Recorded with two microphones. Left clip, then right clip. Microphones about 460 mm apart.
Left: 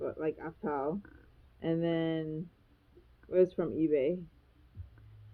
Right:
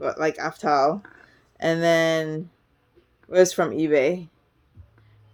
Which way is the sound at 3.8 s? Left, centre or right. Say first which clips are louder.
Right 9 dB; centre.